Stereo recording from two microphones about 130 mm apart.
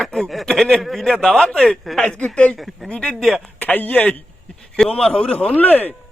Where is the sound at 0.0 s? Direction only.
Centre (ahead or behind).